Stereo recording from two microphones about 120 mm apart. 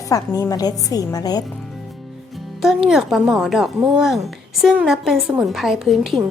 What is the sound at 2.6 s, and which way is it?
Speech, 5° right (ahead or behind).